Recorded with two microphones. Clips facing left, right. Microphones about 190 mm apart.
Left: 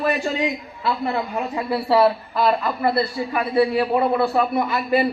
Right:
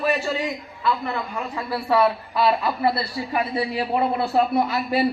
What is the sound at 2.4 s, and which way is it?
A man's voice, 50° left (ahead or behind).